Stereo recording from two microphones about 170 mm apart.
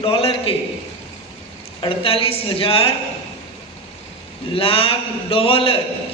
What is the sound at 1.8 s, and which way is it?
A man's voice, 30° left (ahead or behind).